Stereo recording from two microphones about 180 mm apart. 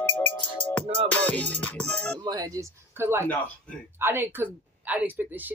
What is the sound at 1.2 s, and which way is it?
Speech, 5° left (ahead or behind).